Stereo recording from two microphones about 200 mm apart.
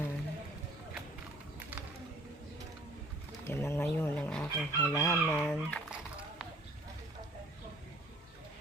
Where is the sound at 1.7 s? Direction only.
10° right (ahead or behind).